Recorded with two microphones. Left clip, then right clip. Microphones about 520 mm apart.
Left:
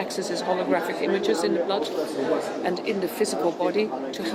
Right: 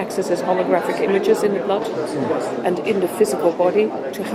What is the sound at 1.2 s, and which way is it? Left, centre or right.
Speech, right.